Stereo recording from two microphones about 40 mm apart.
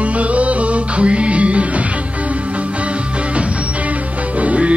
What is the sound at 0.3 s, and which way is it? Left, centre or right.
Music, right.